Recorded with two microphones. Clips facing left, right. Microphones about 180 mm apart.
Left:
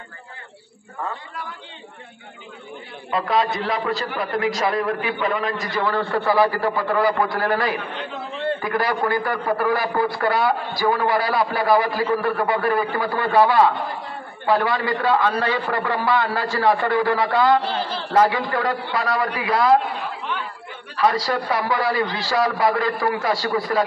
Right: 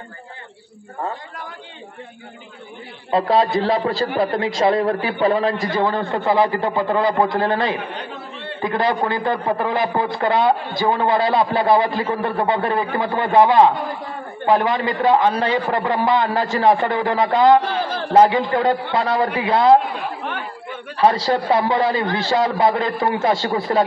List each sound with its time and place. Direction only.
3.1 s a man's voice: 30° right (ahead or behind)
17.8 s a sound: 50° right (ahead or behind)
18.1 s a man's voice: 25° right (ahead or behind)
20.2 s chatter: 50° right (ahead or behind)
20.9 s a man's voice: 25° right (ahead or behind)